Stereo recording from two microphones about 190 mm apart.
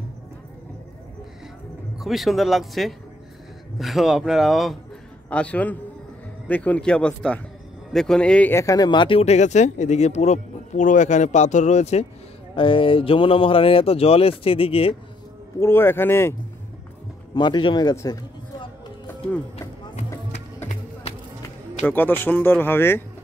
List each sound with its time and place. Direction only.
2.0 s speech: centre (ahead or behind); by 15.0 s 30° left (ahead or behind)
15.6 s speech: 10° left (ahead or behind)
17.3 s a man's voice: 25° left (ahead or behind)
21.8 s speech: 10° left (ahead or behind)